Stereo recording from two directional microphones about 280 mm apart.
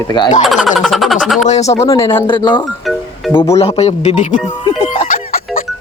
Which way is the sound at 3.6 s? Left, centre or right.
Left.